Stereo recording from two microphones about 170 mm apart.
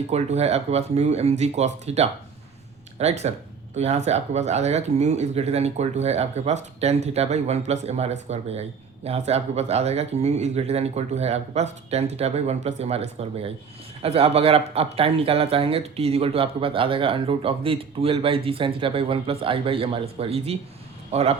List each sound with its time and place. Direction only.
0.1 s a man's voice: 40° right (ahead or behind)